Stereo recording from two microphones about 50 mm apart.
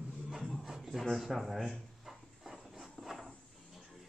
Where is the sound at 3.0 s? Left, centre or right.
Right.